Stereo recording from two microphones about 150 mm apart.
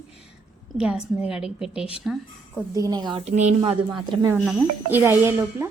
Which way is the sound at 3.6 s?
30° right (ahead or behind).